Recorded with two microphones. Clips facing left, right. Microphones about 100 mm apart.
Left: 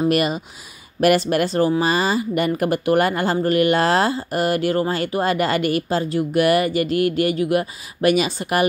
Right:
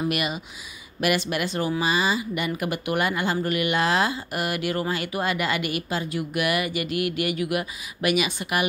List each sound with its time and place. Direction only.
0.1 s speech: 40° left (ahead or behind)